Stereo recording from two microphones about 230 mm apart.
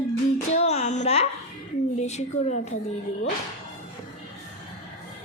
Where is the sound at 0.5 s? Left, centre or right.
Left.